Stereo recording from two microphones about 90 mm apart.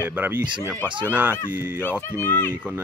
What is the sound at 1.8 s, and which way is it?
Speech, 25° left (ahead or behind).